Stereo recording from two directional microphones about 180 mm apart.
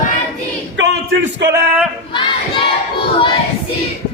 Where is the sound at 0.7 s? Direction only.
85° right.